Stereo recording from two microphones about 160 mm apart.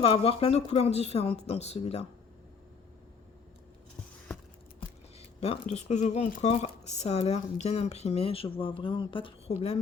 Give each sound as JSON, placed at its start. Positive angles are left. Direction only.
{"t": 0.0, "sound": "speech", "side_deg": 35}
{"t": 5.1, "sound": "speech", "side_deg": 40}